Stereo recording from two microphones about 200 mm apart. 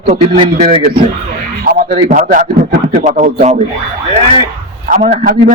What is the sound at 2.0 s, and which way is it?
A man's voice, 35° right (ahead or behind).